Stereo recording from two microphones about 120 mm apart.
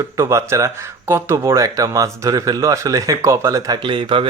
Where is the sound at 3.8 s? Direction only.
45° right (ahead or behind).